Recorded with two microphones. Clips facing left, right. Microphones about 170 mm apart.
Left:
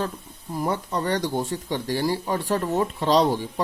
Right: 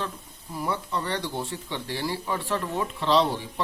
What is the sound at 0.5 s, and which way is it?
Speech, 45° left (ahead or behind).